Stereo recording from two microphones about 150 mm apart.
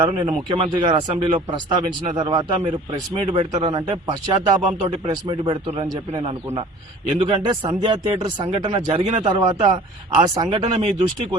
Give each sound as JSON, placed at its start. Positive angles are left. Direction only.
{"t": 0.0, "sound": "speech", "side_deg": -30}
{"t": 9.2, "sound": "speech", "side_deg": -30}